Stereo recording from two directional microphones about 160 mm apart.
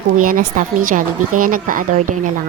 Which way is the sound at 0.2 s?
55° right (ahead or behind).